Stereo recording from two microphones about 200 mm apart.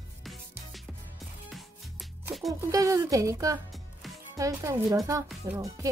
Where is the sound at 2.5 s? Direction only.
15° right (ahead or behind).